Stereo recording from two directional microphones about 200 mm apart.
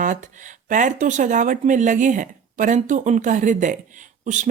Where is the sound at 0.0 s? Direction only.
40° right (ahead or behind).